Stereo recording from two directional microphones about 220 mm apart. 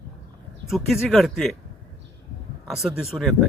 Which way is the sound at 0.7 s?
Centre (ahead or behind).